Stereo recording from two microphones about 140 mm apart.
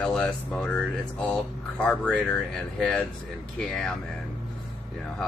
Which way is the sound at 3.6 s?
5° left (ahead or behind).